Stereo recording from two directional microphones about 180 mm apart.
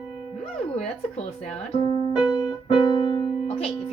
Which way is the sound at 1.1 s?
35° left (ahead or behind).